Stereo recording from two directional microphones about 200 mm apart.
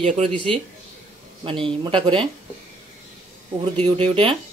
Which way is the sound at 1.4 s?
25° right (ahead or behind).